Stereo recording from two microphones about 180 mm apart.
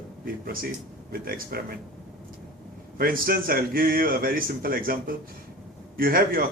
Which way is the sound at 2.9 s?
55° right (ahead or behind).